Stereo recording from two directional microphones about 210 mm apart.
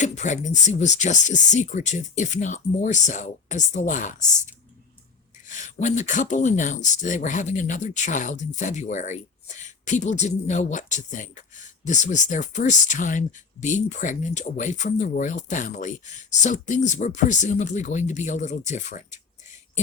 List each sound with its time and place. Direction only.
0.0 s speech: 35° left (ahead or behind)